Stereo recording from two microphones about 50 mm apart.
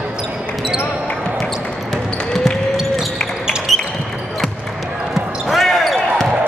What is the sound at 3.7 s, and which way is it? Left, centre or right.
Basketball bounce, centre.